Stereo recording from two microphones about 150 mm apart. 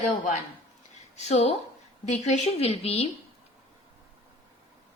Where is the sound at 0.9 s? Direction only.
45° left (ahead or behind).